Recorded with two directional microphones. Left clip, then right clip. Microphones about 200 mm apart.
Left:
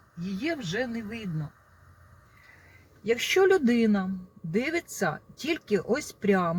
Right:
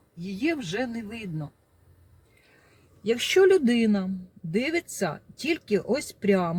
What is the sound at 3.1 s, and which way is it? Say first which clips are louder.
Speech: right 2 dB; 25° right (ahead or behind).